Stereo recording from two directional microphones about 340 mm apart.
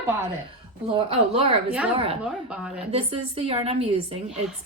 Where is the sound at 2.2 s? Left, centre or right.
Centre.